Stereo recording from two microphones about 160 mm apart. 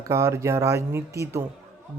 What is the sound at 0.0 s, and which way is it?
Speech, 20° right (ahead or behind).